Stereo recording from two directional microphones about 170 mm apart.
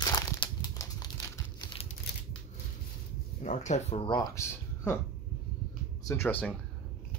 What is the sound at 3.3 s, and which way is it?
Speech, 45° left (ahead or behind).